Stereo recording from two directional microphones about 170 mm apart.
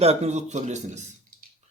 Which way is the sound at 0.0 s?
40° right (ahead or behind).